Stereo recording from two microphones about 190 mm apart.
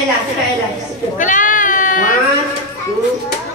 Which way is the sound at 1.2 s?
45° left (ahead or behind).